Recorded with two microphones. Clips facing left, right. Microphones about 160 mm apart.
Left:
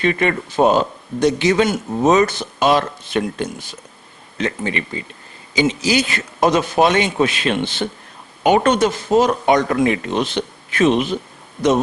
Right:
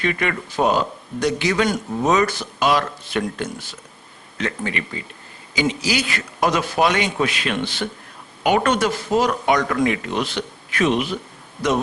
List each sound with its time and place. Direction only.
0.0 s speech: 30° left (ahead or behind)